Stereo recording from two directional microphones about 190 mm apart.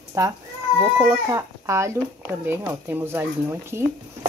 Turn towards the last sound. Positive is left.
turn(degrees=-15)  # may be behind; listen again after turning